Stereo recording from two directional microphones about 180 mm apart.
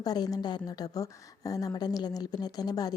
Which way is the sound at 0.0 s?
20° left (ahead or behind).